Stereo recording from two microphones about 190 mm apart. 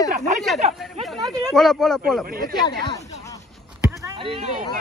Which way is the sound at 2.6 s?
20° left (ahead or behind).